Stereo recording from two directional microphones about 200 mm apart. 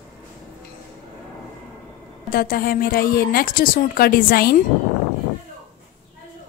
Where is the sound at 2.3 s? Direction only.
45° left (ahead or behind).